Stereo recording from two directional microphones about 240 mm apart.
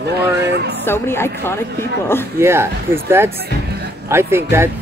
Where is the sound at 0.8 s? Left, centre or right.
Centre.